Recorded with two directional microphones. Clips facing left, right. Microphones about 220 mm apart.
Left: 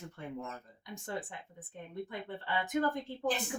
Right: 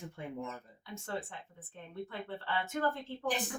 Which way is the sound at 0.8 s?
15° left (ahead or behind).